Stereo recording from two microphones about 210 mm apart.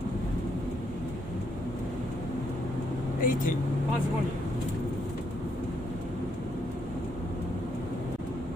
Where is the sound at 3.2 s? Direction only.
40° left (ahead or behind).